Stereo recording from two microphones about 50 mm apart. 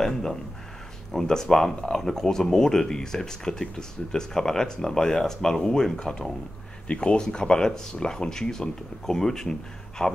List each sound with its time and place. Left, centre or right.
0.0 s speech: centre